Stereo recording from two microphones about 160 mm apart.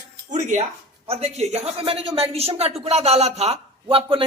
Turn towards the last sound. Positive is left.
turn(degrees=-35)  # may be behind; listen again after turning